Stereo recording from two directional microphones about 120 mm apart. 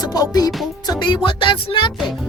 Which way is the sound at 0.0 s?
30° left (ahead or behind).